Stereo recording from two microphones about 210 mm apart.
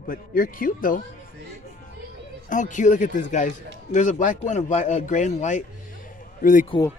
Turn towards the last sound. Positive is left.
turn(degrees=40)  # may be behind; listen again after turning